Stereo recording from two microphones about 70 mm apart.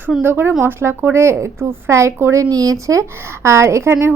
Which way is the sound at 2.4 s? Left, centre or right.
Right.